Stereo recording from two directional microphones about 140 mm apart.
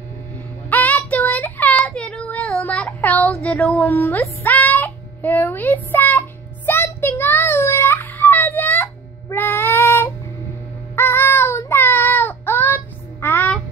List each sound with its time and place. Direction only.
0.7 s child singing: 10° left (ahead or behind)
3.5 s a sound: 10° left (ahead or behind)
11.0 s child singing: 15° left (ahead or behind)